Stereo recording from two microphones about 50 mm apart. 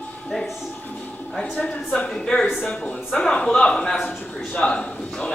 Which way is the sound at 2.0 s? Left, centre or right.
Centre.